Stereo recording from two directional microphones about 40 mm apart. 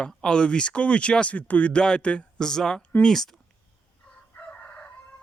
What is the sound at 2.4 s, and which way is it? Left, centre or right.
Speech, centre.